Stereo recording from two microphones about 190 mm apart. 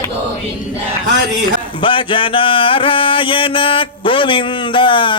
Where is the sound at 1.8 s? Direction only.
25° left (ahead or behind).